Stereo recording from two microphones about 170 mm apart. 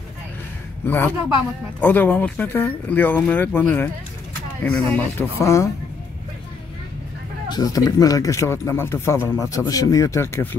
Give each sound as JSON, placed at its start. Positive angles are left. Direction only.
{"t": 0.8, "sound": "speech", "side_deg": 10}
{"t": 7.4, "sound": "speech", "side_deg": 20}